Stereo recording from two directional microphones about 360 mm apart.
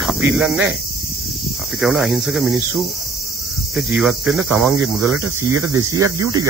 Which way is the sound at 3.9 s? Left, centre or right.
Centre.